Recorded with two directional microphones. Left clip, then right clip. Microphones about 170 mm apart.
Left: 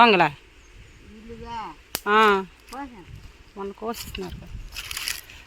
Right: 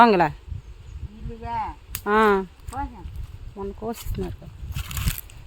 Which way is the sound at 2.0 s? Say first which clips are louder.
Left 1 dB; 30° right (ahead or behind).